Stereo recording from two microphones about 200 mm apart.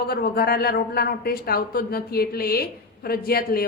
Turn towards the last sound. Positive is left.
turn(degrees=50)  # may be behind; listen again after turning